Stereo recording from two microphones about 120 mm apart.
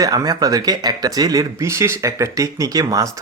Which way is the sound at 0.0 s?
30° right (ahead or behind).